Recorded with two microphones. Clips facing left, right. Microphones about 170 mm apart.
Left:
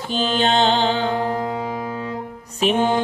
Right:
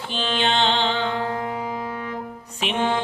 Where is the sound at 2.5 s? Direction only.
40° left (ahead or behind).